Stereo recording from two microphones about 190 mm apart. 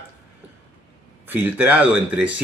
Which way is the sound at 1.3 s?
10° right (ahead or behind).